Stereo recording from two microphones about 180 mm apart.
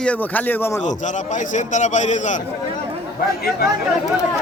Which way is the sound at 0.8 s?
45° left (ahead or behind).